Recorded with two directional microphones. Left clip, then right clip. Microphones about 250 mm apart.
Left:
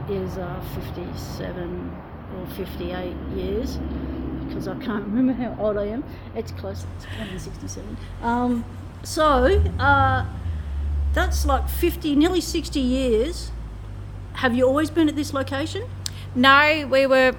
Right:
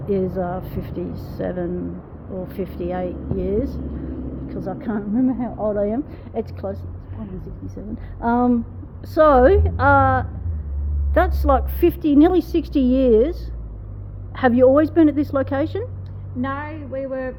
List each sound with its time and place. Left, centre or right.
0.3 s a woman's voice: right
8.2 s a woman's voice: right
16.4 s speech: left